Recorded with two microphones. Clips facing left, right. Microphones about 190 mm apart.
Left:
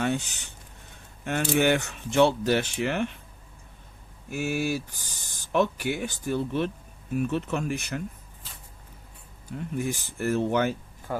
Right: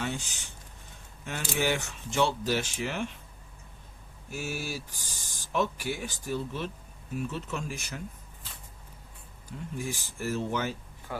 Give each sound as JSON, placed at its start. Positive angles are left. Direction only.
{"t": 0.0, "sound": "a sound", "side_deg": 60}
{"t": 1.2, "sound": "speech", "side_deg": 60}
{"t": 4.3, "sound": "speech", "side_deg": 60}
{"t": 9.7, "sound": "speech", "side_deg": 60}